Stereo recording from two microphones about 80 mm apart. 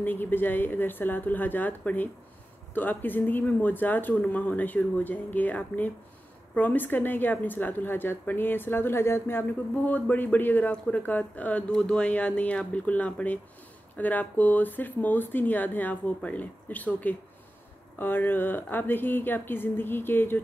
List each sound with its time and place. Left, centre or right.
0.0 s speech: left